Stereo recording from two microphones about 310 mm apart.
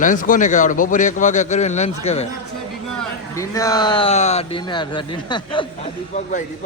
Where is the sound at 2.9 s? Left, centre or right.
Centre.